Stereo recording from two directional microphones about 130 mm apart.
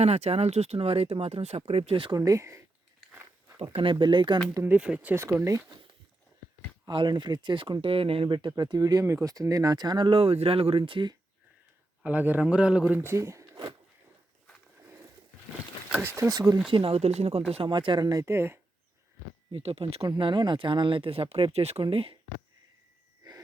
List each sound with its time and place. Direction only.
0.0 s speech: 55° right (ahead or behind)
2.1 s speech: 25° right (ahead or behind)
3.6 s speech: 45° right (ahead or behind)
4.5 s speech: 15° right (ahead or behind)
6.8 s speech: 35° right (ahead or behind)
12.0 s speech: 15° right (ahead or behind)
15.9 s speech: 15° right (ahead or behind)
16.7 s speech: 45° right (ahead or behind)
17.5 s speech: 40° right (ahead or behind); by 18.6 s 20° right (ahead or behind)
19.5 s speech: 45° right (ahead or behind)
23.2 s wheeze: 30° right (ahead or behind)